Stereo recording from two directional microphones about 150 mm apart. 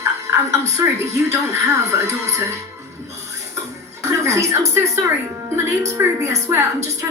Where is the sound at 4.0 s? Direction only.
20° right (ahead or behind).